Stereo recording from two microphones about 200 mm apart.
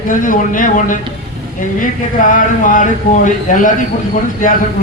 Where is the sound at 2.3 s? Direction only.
40° left (ahead or behind).